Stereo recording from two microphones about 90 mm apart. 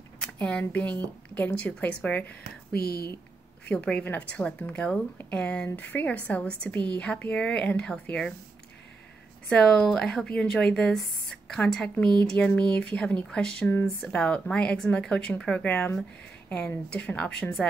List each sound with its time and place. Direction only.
0.2 s a woman's voice: 15° left (ahead or behind)
3.6 s a woman's voice: 15° left (ahead or behind)
9.5 s a woman's voice: 5° left (ahead or behind)